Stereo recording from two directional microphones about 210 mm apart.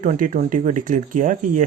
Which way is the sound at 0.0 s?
40° right (ahead or behind).